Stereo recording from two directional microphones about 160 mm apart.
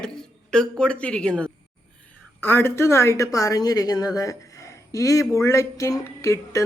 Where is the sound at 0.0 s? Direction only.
5° left (ahead or behind).